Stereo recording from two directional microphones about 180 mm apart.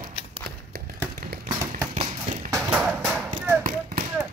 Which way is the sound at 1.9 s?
40° right (ahead or behind).